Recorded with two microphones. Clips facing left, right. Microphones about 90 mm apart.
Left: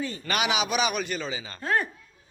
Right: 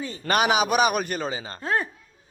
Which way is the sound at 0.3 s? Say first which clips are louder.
Right 6 dB; 40° right (ahead or behind).